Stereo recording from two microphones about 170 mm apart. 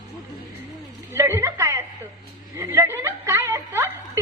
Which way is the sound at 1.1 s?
15° right (ahead or behind).